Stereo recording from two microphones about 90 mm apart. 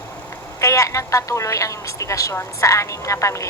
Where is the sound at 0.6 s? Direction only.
35° left (ahead or behind).